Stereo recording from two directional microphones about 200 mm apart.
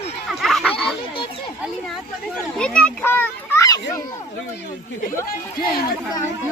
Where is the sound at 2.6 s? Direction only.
5° left (ahead or behind).